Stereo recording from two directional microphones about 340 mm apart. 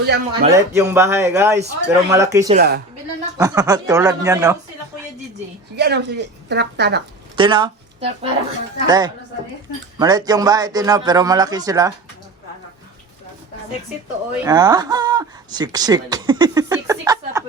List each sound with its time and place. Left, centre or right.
0.0 s a woman's voice: right
0.5 s speech: centre
2.6 s a woman's voice: right
3.3 s speech: centre
5.7 s a woman's voice: right
7.3 s speech: centre
14.4 s speech: centre